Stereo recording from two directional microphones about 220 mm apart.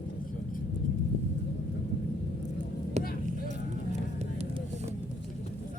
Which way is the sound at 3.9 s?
30° right (ahead or behind).